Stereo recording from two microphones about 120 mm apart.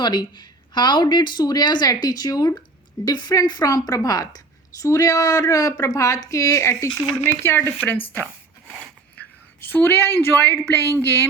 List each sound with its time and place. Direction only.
0.0 s speech: 40° left (ahead or behind); by 7.7 s 20° left (ahead or behind)
9.6 s speech: 15° left (ahead or behind)